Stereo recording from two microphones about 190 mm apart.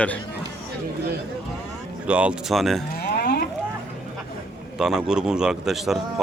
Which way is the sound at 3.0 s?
55° left (ahead or behind).